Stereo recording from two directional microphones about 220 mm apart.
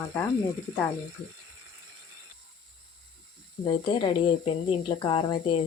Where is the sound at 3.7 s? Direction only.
20° left (ahead or behind).